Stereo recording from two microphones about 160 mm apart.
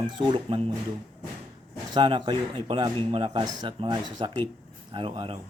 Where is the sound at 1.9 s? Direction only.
30° right (ahead or behind).